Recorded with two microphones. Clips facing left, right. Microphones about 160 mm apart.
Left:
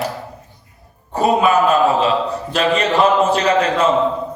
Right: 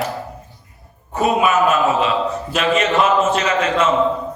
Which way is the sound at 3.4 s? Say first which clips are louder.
Left 2 dB; 35° left (ahead or behind).